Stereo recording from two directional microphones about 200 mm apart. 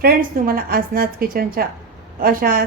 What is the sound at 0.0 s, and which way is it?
A woman's voice, 45° right (ahead or behind).